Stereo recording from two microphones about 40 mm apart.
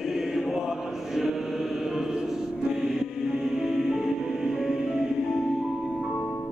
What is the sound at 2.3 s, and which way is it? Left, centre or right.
Music, centre.